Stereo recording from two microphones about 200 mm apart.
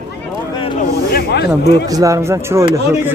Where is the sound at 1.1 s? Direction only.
55° left (ahead or behind).